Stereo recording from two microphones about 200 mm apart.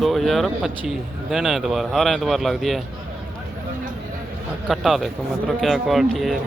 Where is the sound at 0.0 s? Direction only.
Centre (ahead or behind).